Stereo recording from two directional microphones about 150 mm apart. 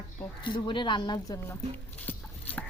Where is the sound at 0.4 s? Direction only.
35° left (ahead or behind).